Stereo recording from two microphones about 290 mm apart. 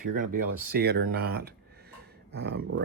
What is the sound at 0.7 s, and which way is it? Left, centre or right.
Speech, right.